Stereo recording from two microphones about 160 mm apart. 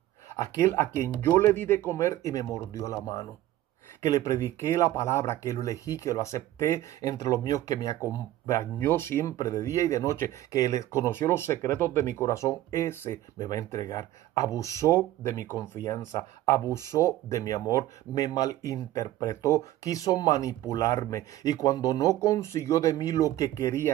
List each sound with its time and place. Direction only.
0.3 s speech: 20° left (ahead or behind)